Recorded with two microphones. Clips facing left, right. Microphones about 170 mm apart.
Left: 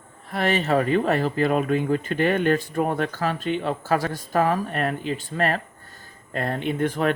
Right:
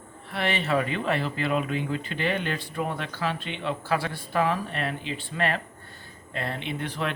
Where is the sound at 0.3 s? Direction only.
40° left (ahead or behind).